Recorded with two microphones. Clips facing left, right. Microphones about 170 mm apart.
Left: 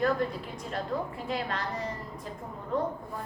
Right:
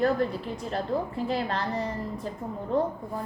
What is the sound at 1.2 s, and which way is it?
Speech, 30° right (ahead or behind).